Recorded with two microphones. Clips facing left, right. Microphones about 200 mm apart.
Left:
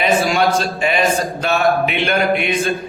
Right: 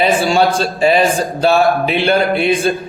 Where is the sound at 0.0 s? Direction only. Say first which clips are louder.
Right 3 dB; 30° right (ahead or behind).